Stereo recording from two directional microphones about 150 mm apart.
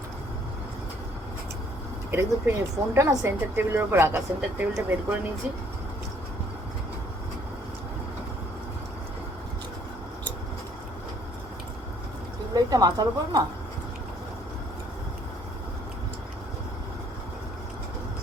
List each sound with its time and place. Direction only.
2.0 s speech: 15° right (ahead or behind)
12.5 s a woman's voice: 25° right (ahead or behind)